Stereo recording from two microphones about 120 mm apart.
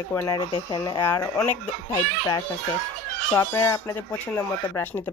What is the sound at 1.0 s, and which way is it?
Speech, 20° left (ahead or behind).